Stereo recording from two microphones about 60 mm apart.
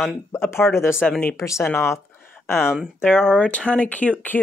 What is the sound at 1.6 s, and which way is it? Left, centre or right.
Speech, left.